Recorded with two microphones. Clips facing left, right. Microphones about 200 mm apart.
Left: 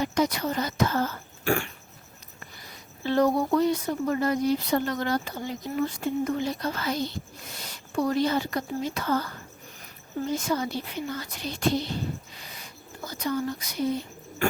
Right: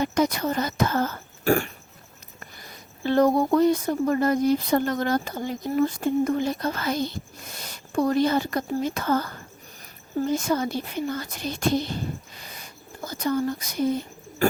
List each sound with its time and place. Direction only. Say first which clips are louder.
0.0 s speech: right 2 dB; 50° right (ahead or behind)
3.1 s speech: right 3 dB; 45° right (ahead or behind)
12.4 s a sound: right 1 dB; 45° right (ahead or behind)
13.1 s speech: right 4 dB; 45° right (ahead or behind)